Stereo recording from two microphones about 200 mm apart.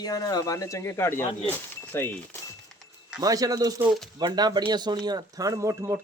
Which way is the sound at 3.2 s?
20° right (ahead or behind).